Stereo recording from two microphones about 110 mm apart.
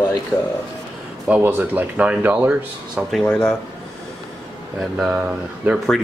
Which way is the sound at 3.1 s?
5° left (ahead or behind).